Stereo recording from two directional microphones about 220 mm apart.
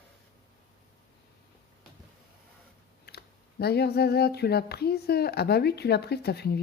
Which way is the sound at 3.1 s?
45° left (ahead or behind).